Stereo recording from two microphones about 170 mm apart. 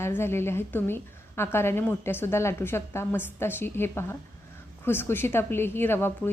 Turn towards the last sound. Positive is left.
turn(degrees=15)  # may be behind; listen again after turning